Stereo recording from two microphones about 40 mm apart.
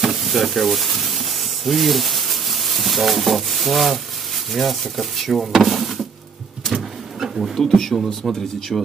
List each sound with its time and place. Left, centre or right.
0.0 s sizzle: centre
4.5 s speech: centre
7.2 s insect: centre
7.5 s speech: centre